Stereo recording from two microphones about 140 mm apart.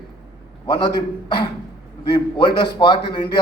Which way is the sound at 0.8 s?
30° left (ahead or behind).